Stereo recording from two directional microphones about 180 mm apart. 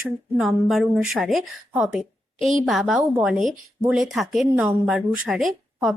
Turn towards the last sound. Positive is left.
turn(degrees=0)  # may be behind; listen again after turning